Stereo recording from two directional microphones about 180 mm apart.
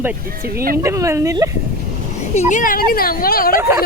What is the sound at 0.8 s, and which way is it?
Speech, 15° right (ahead or behind).